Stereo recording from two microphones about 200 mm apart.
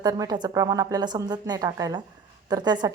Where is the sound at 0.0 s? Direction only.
20° right (ahead or behind).